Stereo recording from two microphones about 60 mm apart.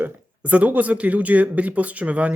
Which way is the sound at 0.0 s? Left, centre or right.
Right.